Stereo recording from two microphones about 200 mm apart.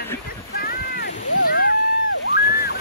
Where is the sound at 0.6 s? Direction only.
50° left (ahead or behind).